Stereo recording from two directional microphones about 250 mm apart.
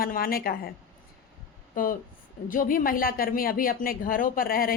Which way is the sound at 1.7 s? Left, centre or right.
Left.